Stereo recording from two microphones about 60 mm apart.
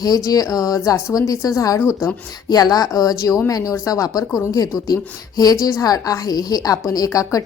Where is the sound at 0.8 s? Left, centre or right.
Left.